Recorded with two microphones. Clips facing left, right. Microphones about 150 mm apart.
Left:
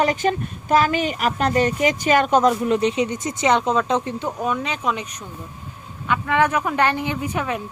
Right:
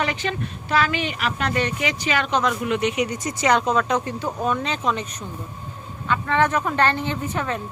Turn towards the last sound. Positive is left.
turn(degrees=10)  # may be behind; listen again after turning